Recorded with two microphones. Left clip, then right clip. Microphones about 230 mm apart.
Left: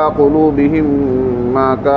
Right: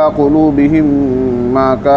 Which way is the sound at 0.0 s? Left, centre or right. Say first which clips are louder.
Right 1 dB; right.